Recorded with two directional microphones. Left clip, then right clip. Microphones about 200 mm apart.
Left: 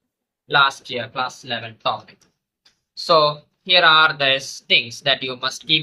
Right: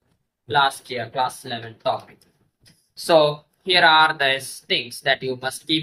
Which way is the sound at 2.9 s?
5° left (ahead or behind).